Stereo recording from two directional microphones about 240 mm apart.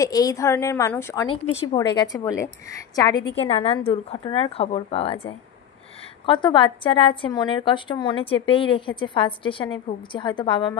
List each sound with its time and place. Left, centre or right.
0.0 s a woman's voice: centre
1.3 s a woman's voice: left